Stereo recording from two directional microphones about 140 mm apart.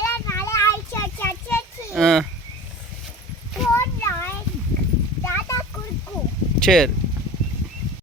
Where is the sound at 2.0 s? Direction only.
Centre (ahead or behind).